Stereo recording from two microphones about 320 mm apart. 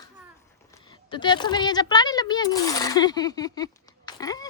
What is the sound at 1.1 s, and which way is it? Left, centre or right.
Speech, centre.